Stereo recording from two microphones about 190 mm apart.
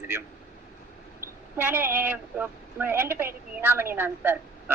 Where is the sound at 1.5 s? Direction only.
10° right (ahead or behind).